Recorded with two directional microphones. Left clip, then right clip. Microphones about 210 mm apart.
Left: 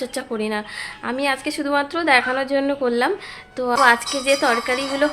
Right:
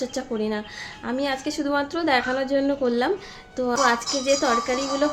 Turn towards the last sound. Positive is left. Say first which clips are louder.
# left 3 dB
turn(degrees=0)  # may be behind; listen again after turning